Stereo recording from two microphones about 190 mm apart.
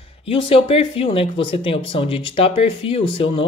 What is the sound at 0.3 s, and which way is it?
Speech, 30° left (ahead or behind).